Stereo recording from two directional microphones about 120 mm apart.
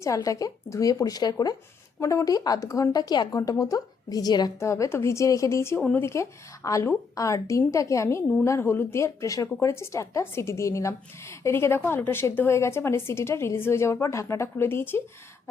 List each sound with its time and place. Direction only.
0.0 s speech: 25° left (ahead or behind)